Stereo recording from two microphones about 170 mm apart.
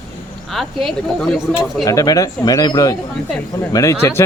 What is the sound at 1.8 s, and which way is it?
Speech, 20° left (ahead or behind).